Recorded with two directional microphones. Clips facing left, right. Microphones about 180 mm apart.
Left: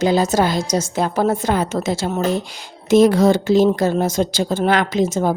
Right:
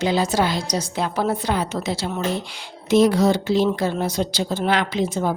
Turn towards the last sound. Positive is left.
turn(degrees=45)  # may be behind; listen again after turning